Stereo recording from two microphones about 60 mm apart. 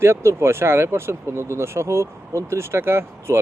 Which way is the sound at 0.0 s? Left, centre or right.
Right.